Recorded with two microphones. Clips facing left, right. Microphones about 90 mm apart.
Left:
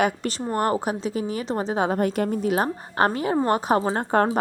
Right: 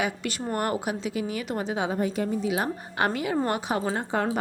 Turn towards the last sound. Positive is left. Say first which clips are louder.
# left 5 dB
turn(degrees=45)  # may be behind; listen again after turning